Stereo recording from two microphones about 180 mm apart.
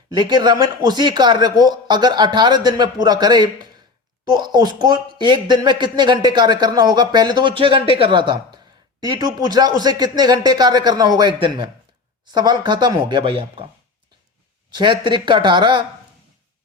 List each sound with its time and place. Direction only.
0.1 s speech: 25° right (ahead or behind)
14.7 s speech: 25° right (ahead or behind)